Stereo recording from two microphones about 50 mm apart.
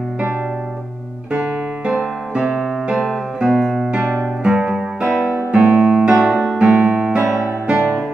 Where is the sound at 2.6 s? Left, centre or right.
Centre.